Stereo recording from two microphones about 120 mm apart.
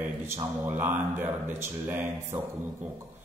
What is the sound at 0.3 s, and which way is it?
A man's voice, 20° right (ahead or behind).